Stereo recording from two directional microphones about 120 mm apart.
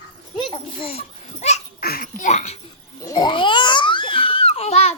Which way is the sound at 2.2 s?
70° left (ahead or behind).